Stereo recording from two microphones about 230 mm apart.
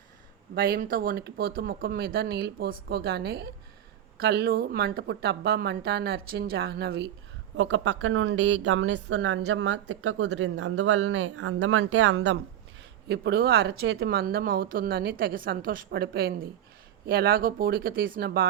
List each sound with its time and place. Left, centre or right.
0.5 s a woman's voice: right